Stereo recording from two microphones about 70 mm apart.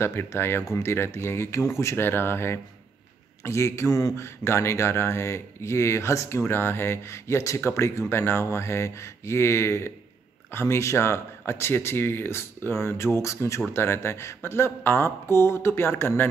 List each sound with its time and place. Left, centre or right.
0.0 s speech: left